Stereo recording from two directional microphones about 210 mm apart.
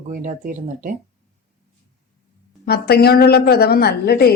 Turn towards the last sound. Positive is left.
turn(degrees=50)  # may be behind; listen again after turning